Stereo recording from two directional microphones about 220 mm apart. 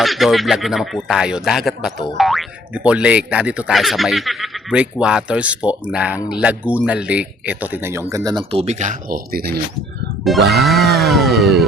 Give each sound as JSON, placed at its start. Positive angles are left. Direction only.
{"t": 0.0, "sound": "speech", "side_deg": 0}
{"t": 10.5, "sound": "speech", "side_deg": 0}